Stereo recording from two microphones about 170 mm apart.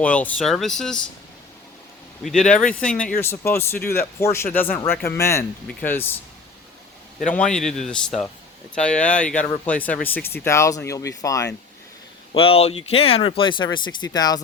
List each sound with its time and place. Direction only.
0.0 s speech: 10° left (ahead or behind)
2.2 s speech: 5° left (ahead or behind)
7.3 s speech: 5° left (ahead or behind)
12.3 s speech: 35° left (ahead or behind)